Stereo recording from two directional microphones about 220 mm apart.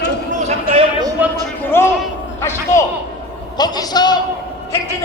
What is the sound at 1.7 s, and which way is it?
Speech, 10° left (ahead or behind).